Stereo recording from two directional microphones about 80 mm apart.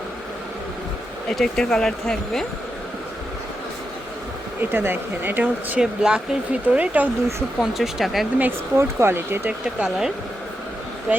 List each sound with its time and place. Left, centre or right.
1.3 s speech: centre
4.6 s speech: right
5.8 s speech: centre
7.6 s speech: centre
8.4 s speech: right
9.5 s speech: centre
11.1 s speech: centre